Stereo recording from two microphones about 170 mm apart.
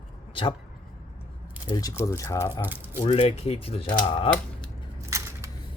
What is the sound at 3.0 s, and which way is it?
Speech, 40° left (ahead or behind).